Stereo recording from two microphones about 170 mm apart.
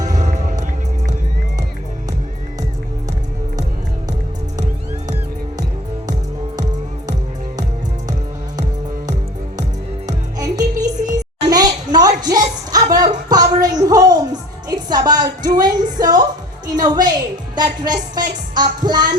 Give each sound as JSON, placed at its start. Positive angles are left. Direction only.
{"t": 0.1, "sound": "music", "side_deg": -45}
{"t": 10.1, "sound": "music", "side_deg": -20}
{"t": 11.4, "sound": "a sound", "side_deg": -25}
{"t": 14.7, "sound": "music", "side_deg": -25}